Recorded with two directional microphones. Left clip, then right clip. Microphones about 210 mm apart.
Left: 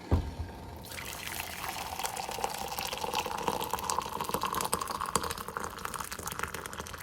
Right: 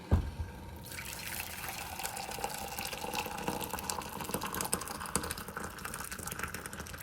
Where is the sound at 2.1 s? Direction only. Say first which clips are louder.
Left 4 dB; centre (ahead or behind).